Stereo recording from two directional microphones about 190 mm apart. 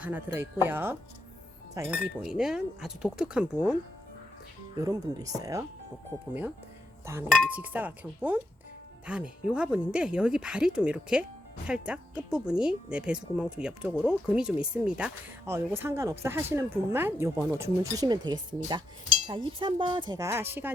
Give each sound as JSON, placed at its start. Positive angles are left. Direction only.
{"t": 0.0, "sound": "speech", "side_deg": -10}
{"t": 4.8, "sound": "speech", "side_deg": -20}
{"t": 7.0, "sound": "speech", "side_deg": -15}